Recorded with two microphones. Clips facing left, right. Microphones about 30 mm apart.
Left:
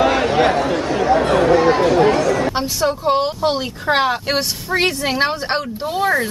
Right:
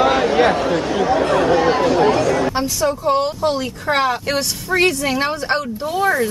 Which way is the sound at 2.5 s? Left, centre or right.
Left.